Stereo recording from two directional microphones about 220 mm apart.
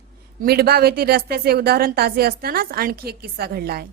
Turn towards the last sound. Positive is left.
turn(degrees=-45)  # may be behind; listen again after turning